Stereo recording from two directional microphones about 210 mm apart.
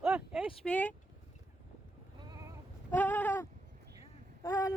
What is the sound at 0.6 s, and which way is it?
Speech, 10° left (ahead or behind).